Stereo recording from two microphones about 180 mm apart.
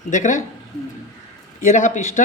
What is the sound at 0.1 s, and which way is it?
Speech, 45° left (ahead or behind).